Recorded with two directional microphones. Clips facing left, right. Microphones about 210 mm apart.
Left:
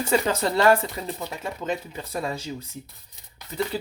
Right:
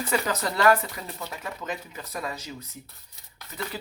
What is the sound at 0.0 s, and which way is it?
Speech, 25° left (ahead or behind).